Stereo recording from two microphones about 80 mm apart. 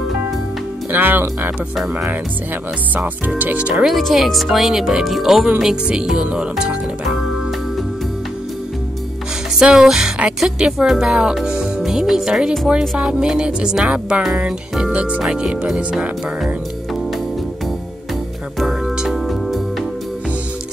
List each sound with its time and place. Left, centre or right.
0.9 s speech: right
2.9 s speech: centre
3.8 s speech: centre
9.6 s speech: centre
18.6 s music: centre